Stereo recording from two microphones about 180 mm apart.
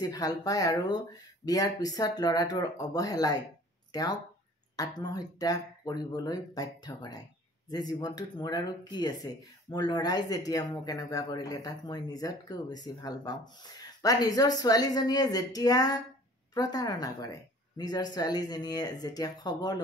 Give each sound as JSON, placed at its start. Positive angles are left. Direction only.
{"t": 0.1, "sound": "speech", "side_deg": 20}